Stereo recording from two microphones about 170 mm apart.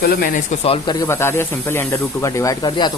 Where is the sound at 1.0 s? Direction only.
15° left (ahead or behind).